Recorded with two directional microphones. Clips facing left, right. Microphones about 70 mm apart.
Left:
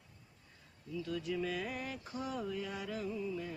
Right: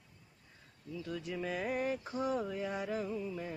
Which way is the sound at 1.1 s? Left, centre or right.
Right.